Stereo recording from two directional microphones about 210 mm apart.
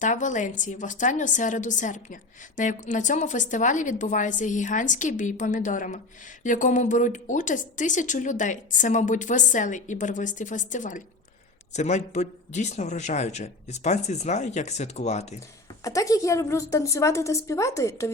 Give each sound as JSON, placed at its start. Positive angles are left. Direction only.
{"t": 0.0, "sound": "a woman's voice", "side_deg": 35}
{"t": 15.8, "sound": "a woman's voice", "side_deg": 15}